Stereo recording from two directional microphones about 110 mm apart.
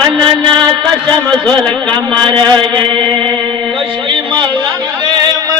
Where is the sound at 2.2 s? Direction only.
45° right (ahead or behind).